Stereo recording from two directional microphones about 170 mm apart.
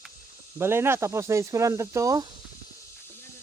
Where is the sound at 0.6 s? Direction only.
15° right (ahead or behind).